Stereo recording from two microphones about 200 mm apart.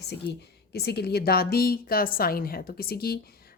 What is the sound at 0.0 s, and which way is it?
Speech, 55° left (ahead or behind).